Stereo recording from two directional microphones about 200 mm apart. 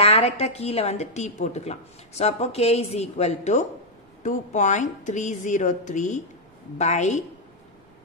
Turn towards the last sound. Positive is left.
turn(degrees=35)  # may be behind; listen again after turning